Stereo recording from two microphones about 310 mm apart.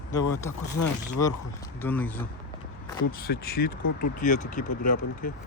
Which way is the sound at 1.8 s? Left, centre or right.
Centre.